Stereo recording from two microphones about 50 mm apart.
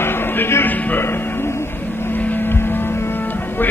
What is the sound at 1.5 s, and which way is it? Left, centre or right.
Music, left.